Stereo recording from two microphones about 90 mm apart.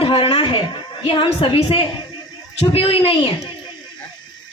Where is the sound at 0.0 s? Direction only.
90° left; by 1.9 s 75° left (ahead or behind).